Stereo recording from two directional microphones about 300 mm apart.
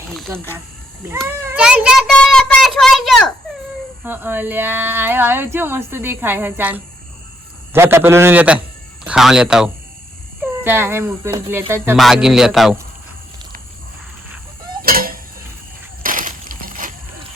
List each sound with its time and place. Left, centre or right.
0.1 s a child's voice: centre
14.8 s a sound: right
16.0 s crushing: right